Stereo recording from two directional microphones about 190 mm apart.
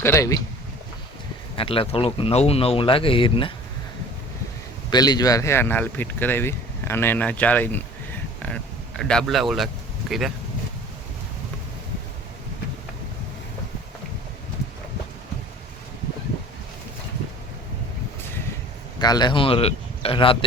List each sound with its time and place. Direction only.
0.0 s speech: 15° left (ahead or behind)
1.5 s speech: 30° left (ahead or behind)
4.9 s speech: 20° left (ahead or behind); by 10.3 s centre (ahead or behind)
18.9 s speech: 20° left (ahead or behind)